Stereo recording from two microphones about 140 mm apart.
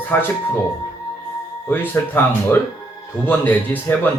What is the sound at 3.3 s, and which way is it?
Speech, 15° left (ahead or behind).